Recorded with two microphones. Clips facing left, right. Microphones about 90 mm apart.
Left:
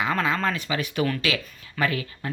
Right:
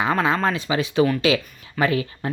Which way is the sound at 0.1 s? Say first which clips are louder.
Right 4 dB; 25° right (ahead or behind).